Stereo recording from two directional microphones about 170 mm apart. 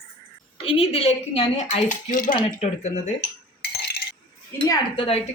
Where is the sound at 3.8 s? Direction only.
70° left (ahead or behind).